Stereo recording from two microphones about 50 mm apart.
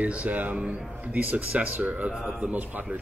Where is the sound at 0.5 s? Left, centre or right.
Right.